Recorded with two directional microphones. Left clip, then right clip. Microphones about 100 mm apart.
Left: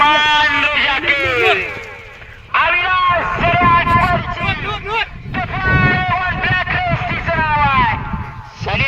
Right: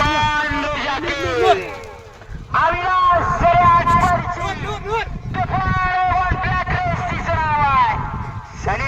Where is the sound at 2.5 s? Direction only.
65° right (ahead or behind).